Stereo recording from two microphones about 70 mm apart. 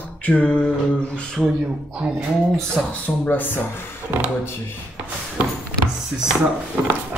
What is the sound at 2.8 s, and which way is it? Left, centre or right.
Speech, centre.